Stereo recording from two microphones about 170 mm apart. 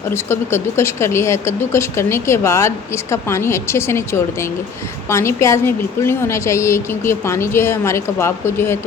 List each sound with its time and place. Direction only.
0.1 s speech: 15° left (ahead or behind)